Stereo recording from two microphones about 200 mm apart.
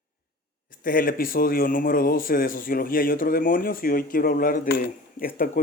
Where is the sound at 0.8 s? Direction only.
45° left (ahead or behind).